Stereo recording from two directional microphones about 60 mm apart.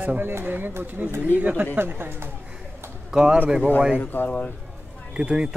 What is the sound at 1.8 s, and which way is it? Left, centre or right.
Speech, right.